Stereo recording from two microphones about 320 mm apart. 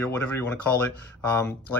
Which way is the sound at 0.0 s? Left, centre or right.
Centre.